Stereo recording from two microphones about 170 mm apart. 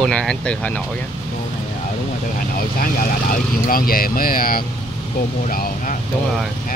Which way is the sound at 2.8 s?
55° left (ahead or behind).